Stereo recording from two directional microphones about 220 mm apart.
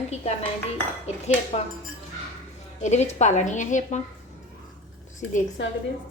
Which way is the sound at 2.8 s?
30° left (ahead or behind).